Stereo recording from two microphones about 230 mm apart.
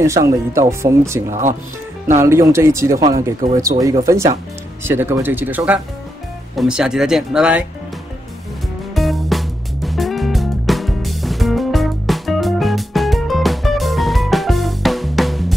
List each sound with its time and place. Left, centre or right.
0.0 s speech: centre
8.9 s music: centre